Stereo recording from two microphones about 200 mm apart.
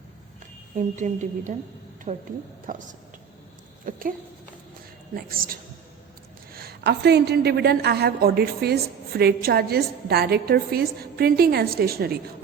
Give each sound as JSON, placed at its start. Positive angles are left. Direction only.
{"t": 0.8, "sound": "a woman's voice", "side_deg": -40}
{"t": 3.9, "sound": "a sound", "side_deg": -45}
{"t": 5.1, "sound": "a woman's voice", "side_deg": -45}